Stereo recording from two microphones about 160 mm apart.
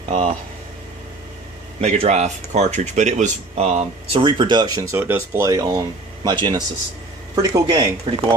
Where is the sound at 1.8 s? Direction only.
45° right (ahead or behind).